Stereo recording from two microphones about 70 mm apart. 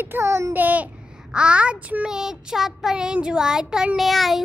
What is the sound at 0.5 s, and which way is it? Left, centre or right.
Child singing, right.